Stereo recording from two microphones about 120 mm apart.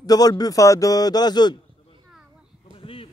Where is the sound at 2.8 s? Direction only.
50° left (ahead or behind).